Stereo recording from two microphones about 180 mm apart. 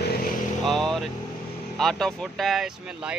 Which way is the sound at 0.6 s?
Centre (ahead or behind).